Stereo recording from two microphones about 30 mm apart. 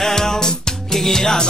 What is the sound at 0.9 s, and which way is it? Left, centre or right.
Music, centre.